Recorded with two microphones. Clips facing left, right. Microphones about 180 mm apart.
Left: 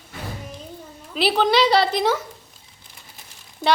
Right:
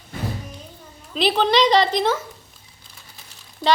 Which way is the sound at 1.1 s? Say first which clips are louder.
Even; 10° left (ahead or behind).